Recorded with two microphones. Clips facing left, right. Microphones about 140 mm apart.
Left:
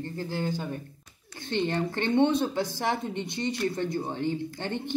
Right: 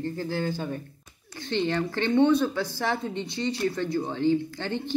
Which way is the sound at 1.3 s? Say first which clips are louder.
Right 1 dB; 15° left (ahead or behind).